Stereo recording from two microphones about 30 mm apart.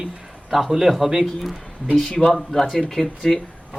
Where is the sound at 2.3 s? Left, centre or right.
Centre.